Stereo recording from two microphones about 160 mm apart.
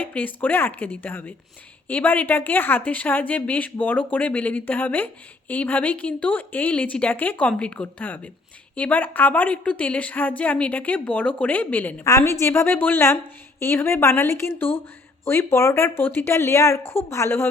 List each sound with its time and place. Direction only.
0.0 s a woman's voice: 10° left (ahead or behind)